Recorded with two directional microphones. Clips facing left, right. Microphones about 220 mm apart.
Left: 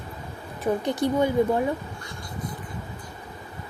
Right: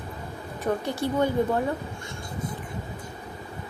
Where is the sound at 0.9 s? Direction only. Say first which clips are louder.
Left 3 dB; 15° left (ahead or behind).